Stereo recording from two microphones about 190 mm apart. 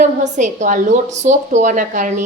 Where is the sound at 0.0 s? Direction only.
40° right (ahead or behind).